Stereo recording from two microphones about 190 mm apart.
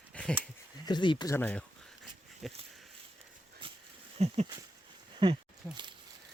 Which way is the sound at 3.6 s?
25° right (ahead or behind).